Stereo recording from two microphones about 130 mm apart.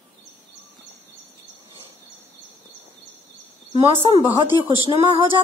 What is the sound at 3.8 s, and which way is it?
A woman's voice, 40° right (ahead or behind).